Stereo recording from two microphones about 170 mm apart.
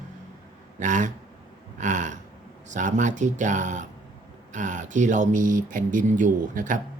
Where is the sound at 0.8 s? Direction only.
50° right (ahead or behind).